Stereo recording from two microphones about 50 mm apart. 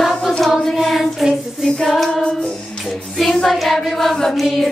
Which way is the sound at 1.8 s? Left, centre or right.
Centre.